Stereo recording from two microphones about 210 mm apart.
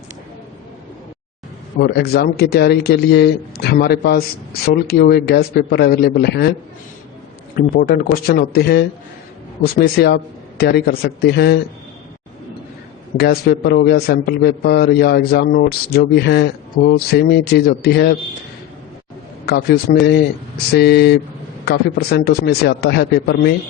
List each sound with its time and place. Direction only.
1.8 s a man's voice: 50° left (ahead or behind)
7.5 s a man's voice: 40° left (ahead or behind)
13.1 s a man's voice: 45° left (ahead or behind)
19.5 s a man's voice: 50° left (ahead or behind)